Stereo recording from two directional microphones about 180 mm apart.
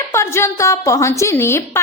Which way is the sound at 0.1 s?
15° left (ahead or behind).